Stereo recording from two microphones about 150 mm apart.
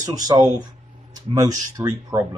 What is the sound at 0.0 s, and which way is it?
Speech, 25° right (ahead or behind).